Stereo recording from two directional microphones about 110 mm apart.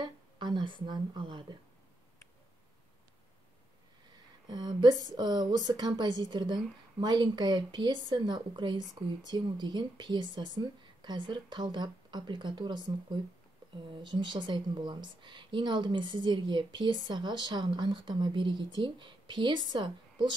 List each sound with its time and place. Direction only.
0.0 s speech: 45° right (ahead or behind)
4.5 s a woman's voice: 40° right (ahead or behind)